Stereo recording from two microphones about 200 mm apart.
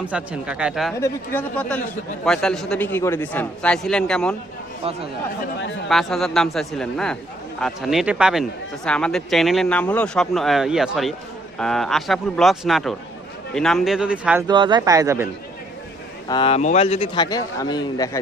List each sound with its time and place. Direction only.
0.0 s a man's voice: 5° right (ahead or behind)
0.9 s a man's voice: 10° left (ahead or behind)
5.9 s a man's voice: centre (ahead or behind)
14.4 s speech: 25° right (ahead or behind)
16.3 s speech: 25° left (ahead or behind)